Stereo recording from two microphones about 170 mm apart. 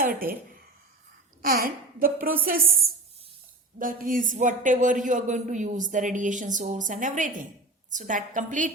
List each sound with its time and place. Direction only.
0.0 s a woman's voice: 55° right (ahead or behind)
1.4 s a woman's voice: 60° right (ahead or behind)